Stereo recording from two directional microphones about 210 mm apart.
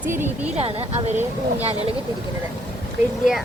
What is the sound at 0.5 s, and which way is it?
Speech, 30° right (ahead or behind).